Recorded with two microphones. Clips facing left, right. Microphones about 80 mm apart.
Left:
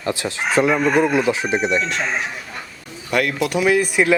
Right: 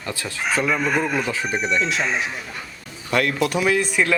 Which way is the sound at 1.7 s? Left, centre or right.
Centre.